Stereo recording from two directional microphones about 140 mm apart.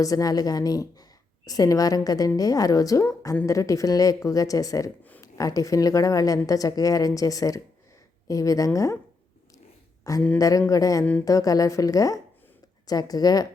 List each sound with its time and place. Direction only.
0.0 s a woman's voice: 25° left (ahead or behind)
10.0 s a woman's voice: 25° left (ahead or behind)